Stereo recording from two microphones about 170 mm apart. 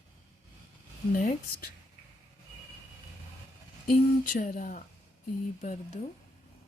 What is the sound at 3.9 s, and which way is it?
Speech, 55° left (ahead or behind).